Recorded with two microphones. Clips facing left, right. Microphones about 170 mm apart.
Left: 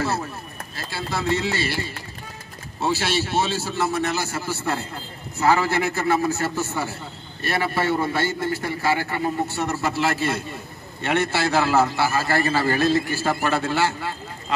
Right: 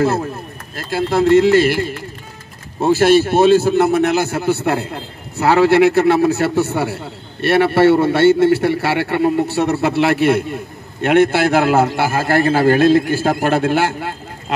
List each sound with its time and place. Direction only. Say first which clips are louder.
0.0 s speech: right 9 dB; 50° right (ahead or behind)
2.8 s a man's voice: right 12 dB; 50° right (ahead or behind)